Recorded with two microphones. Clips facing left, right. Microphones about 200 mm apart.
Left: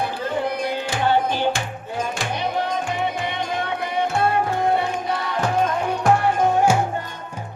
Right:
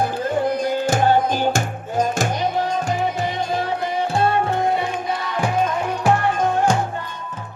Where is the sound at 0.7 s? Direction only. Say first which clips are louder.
Right 3 dB; 45° right (ahead or behind).